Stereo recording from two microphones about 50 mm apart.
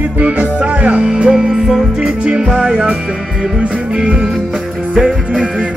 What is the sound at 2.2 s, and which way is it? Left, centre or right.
Music, right.